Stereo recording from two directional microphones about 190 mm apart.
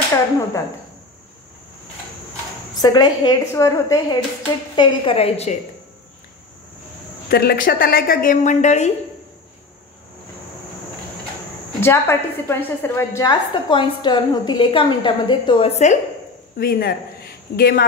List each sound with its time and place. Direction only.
2.8 s a woman's voice: 20° left (ahead or behind)
4.7 s a woman's voice: 30° left (ahead or behind)
7.2 s a woman's voice: 50° left (ahead or behind); by 8.9 s 35° left (ahead or behind)
11.8 s a woman's voice: 15° left (ahead or behind); by 16.0 s 35° left (ahead or behind)
16.5 s a woman's voice: 55° left (ahead or behind)